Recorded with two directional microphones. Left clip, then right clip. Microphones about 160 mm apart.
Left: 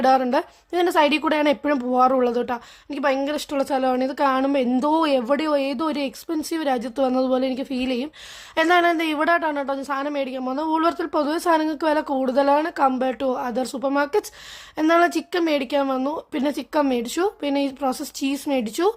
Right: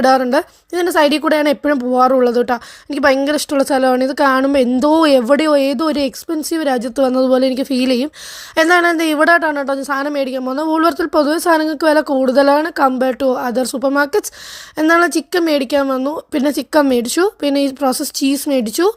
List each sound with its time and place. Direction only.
0.0 s a woman's voice: 30° right (ahead or behind)